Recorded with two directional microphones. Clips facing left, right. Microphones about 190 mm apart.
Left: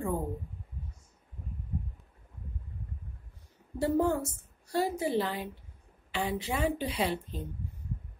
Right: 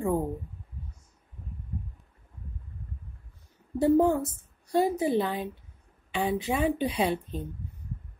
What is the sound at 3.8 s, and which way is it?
A woman's voice, 15° right (ahead or behind).